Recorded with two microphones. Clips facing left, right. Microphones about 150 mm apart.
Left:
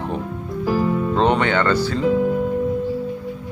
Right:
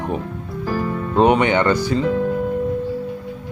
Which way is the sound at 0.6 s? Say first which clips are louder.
Left 3 dB; 5° left (ahead or behind).